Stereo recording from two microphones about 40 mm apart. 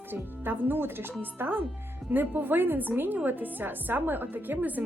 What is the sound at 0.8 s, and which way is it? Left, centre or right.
Music, right.